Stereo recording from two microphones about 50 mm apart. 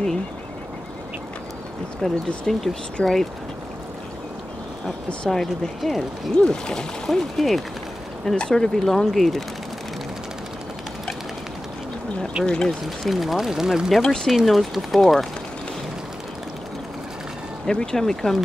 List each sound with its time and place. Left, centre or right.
2.0 s speech: centre
3.0 s speech: left
5.2 s speech: centre
6.3 s speech: centre
12.4 s speech: centre
13.0 s speech: centre
14.0 s speech: centre
14.3 s speech: centre
17.6 s speech: centre